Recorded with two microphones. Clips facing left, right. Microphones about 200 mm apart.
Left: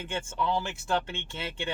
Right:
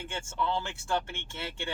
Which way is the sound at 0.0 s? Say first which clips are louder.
Left 2 dB; 20° left (ahead or behind).